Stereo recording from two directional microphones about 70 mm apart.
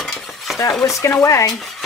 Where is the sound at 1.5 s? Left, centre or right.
Centre.